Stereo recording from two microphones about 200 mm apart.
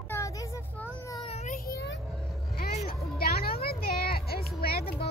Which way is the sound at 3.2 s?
50° left (ahead or behind).